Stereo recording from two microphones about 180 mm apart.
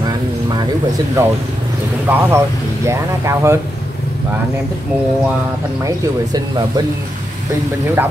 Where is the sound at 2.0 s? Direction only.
15° right (ahead or behind).